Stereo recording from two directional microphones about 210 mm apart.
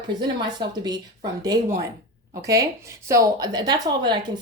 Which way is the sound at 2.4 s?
15° right (ahead or behind).